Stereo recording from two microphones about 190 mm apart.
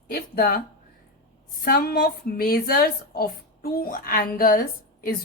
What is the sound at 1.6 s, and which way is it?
A woman's voice, 50° left (ahead or behind).